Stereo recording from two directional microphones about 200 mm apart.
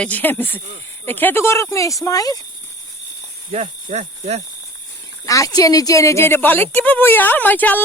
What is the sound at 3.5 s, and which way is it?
Speech, 35° right (ahead or behind).